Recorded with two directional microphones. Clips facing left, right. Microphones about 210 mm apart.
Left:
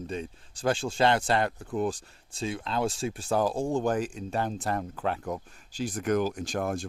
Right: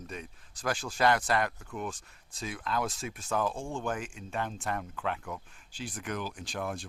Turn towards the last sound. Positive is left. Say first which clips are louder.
# left 6 dB
turn(degrees=45)  # may be behind; listen again after turning